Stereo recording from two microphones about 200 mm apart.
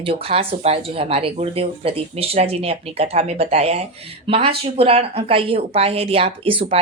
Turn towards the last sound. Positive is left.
turn(degrees=-30)  # may be behind; listen again after turning